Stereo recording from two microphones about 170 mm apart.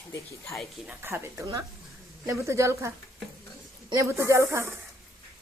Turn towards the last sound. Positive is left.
turn(degrees=-15)  # may be behind; listen again after turning